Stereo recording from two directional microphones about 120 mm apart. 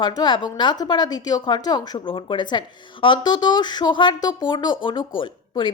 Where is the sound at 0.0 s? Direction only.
40° left (ahead or behind).